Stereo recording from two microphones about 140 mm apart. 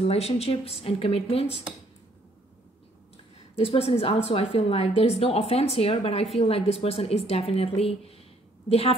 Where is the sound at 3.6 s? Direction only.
45° left (ahead or behind).